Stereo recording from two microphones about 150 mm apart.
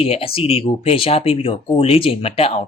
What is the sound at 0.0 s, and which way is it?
Speech, 40° left (ahead or behind).